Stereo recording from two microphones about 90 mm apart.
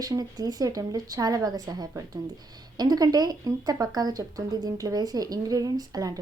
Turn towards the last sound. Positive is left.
turn(degrees=-45)  # may be behind; listen again after turning